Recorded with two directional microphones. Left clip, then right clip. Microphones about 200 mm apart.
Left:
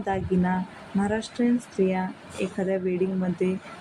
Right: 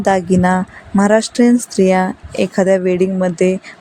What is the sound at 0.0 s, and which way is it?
Speech, 50° right (ahead or behind).